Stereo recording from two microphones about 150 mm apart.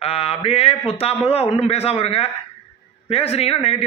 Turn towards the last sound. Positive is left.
turn(degrees=40)  # may be behind; listen again after turning